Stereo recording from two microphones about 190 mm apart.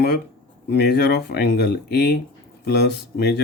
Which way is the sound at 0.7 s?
60° left (ahead or behind).